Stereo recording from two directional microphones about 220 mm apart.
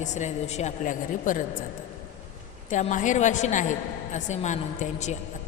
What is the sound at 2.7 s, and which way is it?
A woman's voice, 35° left (ahead or behind).